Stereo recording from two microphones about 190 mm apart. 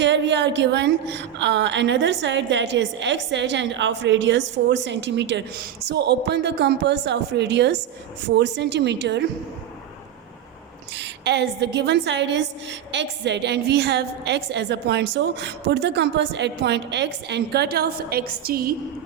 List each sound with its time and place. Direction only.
0.0 s a woman's voice: 70° right (ahead or behind)
10.9 s a woman's voice: 65° right (ahead or behind)